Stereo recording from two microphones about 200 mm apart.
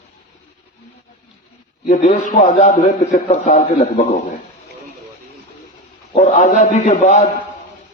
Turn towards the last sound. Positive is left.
turn(degrees=35)  # may be behind; listen again after turning